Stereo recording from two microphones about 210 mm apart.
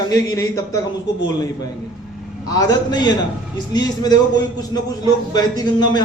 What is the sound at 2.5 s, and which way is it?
A man's voice, 15° left (ahead or behind).